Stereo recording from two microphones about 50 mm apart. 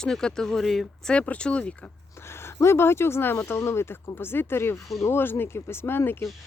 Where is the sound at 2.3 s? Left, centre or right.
Left.